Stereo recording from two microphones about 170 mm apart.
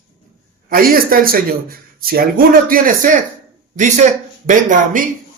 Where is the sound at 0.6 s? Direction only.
60° right (ahead or behind).